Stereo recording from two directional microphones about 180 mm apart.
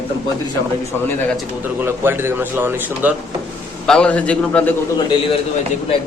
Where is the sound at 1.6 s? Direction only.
10° right (ahead or behind).